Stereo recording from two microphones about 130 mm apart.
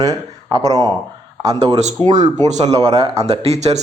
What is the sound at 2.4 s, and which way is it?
A man's voice, 60° right (ahead or behind).